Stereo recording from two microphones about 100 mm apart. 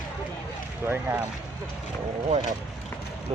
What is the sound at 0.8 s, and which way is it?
Speech, 20° right (ahead or behind).